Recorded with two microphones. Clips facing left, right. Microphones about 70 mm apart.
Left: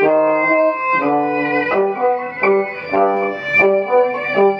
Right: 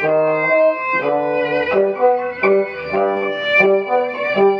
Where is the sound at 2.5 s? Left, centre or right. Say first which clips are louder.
Even; centre.